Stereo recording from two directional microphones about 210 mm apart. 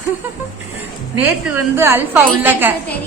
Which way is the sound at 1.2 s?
10° right (ahead or behind).